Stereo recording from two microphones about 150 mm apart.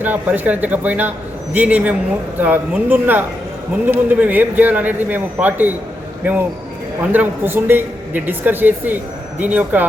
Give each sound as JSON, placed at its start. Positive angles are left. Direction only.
{"t": 0.0, "sound": "a man's voice", "side_deg": -10}